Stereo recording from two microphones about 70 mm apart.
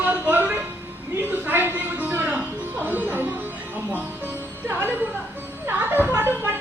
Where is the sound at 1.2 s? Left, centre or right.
Right.